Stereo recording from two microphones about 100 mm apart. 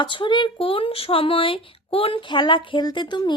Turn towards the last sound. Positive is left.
turn(degrees=50)  # may be behind; listen again after turning